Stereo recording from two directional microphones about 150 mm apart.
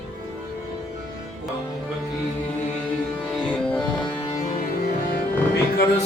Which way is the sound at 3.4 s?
10° left (ahead or behind).